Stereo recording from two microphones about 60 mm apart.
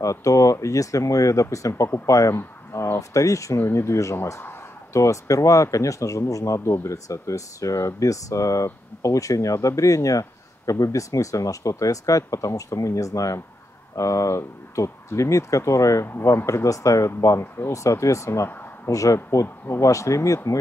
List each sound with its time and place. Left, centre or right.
0.0 s speech: left
2.3 s speech: left
3.5 s speech: left
17.4 s speech: left
17.8 s speech: left
18.9 s speech: left
19.4 s speech: left
19.8 s speech: left